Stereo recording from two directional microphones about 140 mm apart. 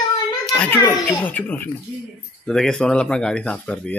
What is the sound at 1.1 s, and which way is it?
Speech, 10° left (ahead or behind).